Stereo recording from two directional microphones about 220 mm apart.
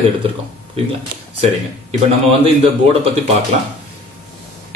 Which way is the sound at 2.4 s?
25° right (ahead or behind).